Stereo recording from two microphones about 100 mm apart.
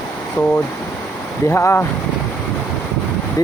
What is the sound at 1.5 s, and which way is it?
Speech, 25° left (ahead or behind).